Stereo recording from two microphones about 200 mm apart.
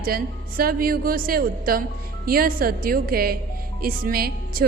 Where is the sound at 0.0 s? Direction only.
45° right (ahead or behind).